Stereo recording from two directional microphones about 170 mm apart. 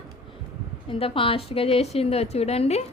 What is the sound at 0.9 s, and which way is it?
A woman's voice, 30° left (ahead or behind).